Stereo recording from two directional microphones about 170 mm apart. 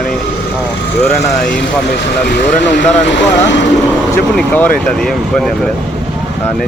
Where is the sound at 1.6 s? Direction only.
75° left (ahead or behind); by 3.6 s 90° left.